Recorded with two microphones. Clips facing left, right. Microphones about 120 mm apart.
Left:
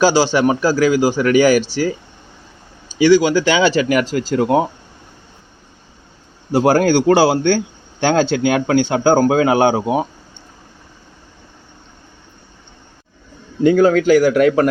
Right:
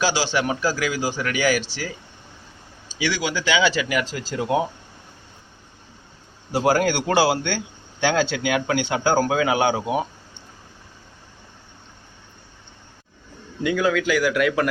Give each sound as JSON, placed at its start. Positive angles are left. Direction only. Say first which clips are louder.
{"t": 0.0, "sound": "a man's voice", "louder": "left 9 dB", "side_deg": 45}
{"t": 3.0, "sound": "a man's voice", "louder": "left 13 dB", "side_deg": 40}
{"t": 4.1, "sound": "speech", "louder": "left 8 dB", "side_deg": 55}
{"t": 6.7, "sound": "speech", "louder": "left 7 dB", "side_deg": 35}
{"t": 13.6, "sound": "speech", "louder": "left 9 dB", "side_deg": 45}